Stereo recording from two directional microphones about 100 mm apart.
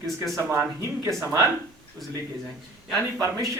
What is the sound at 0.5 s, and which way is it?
Speech, 25° right (ahead or behind).